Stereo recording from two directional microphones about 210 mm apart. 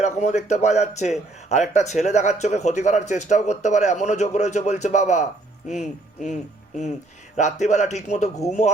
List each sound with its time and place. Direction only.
0.0 s a man's voice: 35° left (ahead or behind)